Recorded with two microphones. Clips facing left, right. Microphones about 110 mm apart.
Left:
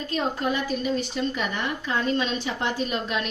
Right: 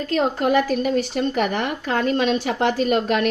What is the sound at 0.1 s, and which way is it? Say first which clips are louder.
A woman's voice: right 7 dB; 65° right (ahead or behind).